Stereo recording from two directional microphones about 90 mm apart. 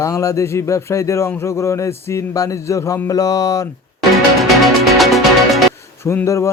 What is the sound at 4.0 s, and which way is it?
Music, centre (ahead or behind).